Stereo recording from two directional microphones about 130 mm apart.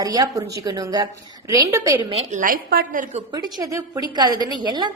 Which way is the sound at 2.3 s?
85° right.